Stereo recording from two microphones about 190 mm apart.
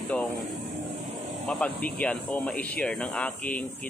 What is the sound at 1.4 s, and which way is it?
Speech, 5° left (ahead or behind).